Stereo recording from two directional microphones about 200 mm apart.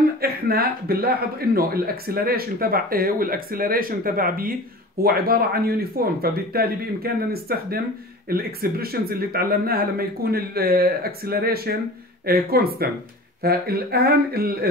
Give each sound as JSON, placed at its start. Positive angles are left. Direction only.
{"t": 0.2, "sound": "speech", "side_deg": -50}